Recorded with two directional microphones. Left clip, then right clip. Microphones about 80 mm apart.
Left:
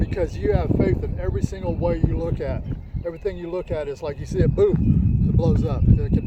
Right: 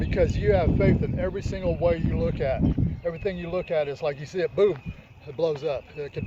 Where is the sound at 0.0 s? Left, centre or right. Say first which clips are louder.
Even; left.